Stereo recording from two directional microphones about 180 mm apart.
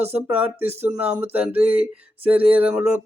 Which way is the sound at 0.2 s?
10° right (ahead or behind).